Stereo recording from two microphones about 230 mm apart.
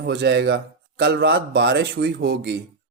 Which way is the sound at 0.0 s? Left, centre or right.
Right.